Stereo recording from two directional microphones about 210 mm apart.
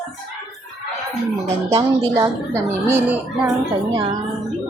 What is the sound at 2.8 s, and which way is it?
A woman's voice, 10° right (ahead or behind).